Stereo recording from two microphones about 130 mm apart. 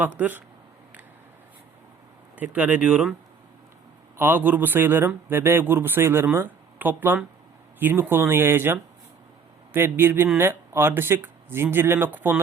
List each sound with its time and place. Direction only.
0.2 s speech: 15° right (ahead or behind)
2.3 s speech: 10° right (ahead or behind)
4.2 s speech: 15° right (ahead or behind)